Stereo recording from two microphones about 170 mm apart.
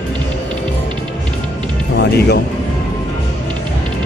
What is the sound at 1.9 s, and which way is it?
Speech, 80° left.